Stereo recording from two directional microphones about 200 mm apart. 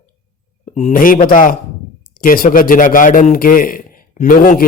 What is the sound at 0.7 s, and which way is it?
A man's voice, 35° left (ahead or behind).